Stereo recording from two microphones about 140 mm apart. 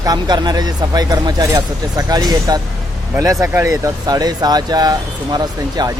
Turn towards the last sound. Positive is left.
turn(degrees=-30)  # may be behind; listen again after turning